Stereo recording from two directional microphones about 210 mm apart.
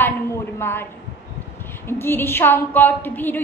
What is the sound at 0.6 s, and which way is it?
Speech, 10° left (ahead or behind).